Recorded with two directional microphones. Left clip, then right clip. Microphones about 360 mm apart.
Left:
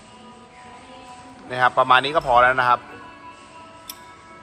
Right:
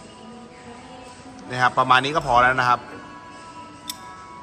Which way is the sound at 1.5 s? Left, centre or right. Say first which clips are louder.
Left 1 dB; centre.